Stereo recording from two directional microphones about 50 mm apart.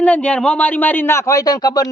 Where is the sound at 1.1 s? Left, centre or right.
Left.